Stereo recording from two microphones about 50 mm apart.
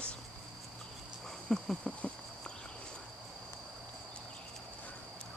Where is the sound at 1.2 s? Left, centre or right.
Centre.